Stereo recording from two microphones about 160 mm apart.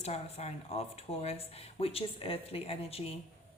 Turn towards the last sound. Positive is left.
turn(degrees=40)  # may be behind; listen again after turning